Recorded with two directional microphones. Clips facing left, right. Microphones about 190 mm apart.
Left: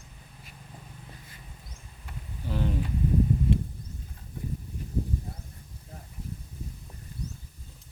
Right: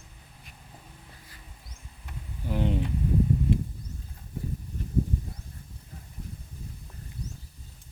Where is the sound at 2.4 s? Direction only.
20° right (ahead or behind).